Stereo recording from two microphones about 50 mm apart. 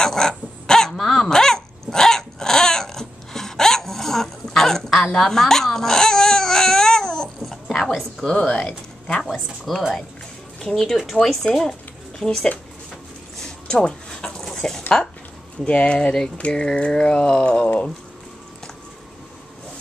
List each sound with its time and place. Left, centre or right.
0.0 s dog: centre
9.3 s speech: centre
11.4 s speech: left
12.2 s speech: centre
13.4 s a sound: centre
15.6 s speech: left